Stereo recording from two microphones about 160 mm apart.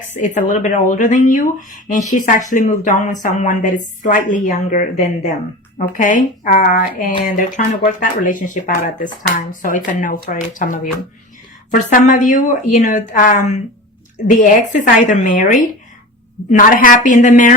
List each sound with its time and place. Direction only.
0.0 s speech: 55° left (ahead or behind)